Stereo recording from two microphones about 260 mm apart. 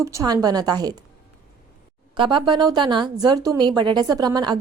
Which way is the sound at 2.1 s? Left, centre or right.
Centre.